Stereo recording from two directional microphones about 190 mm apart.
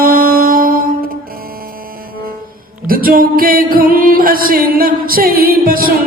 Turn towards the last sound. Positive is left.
turn(degrees=-50)  # may be behind; listen again after turning